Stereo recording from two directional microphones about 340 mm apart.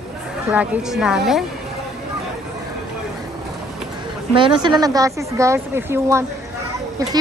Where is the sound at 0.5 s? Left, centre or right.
Centre.